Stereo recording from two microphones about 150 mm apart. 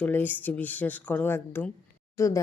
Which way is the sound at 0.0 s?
10° left (ahead or behind).